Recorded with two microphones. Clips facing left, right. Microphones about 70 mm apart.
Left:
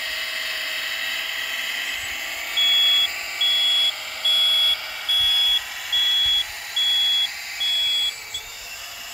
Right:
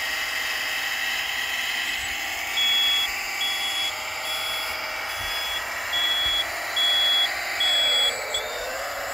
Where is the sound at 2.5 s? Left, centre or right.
Centre; by 8.4 s right.